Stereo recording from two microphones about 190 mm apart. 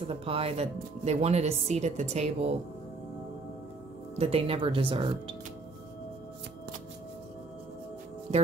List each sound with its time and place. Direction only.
0.0 s speech: 30° right (ahead or behind)
4.2 s speech: 30° right (ahead or behind)